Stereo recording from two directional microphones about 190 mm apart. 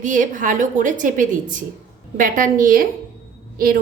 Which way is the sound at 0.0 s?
45° right (ahead or behind).